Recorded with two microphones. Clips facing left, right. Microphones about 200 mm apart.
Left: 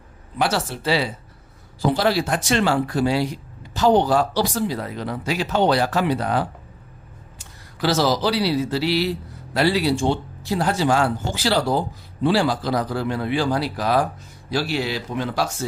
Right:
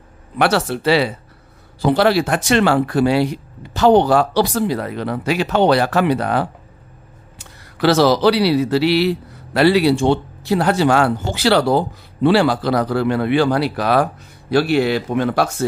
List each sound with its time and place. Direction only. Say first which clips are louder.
0.4 s speech: right 6 dB; 65° right (ahead or behind)